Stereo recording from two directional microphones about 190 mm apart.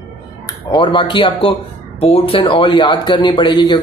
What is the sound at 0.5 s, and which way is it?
Speech, 25° left (ahead or behind).